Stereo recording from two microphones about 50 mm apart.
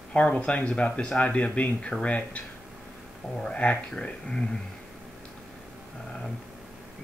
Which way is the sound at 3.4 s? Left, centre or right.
Left.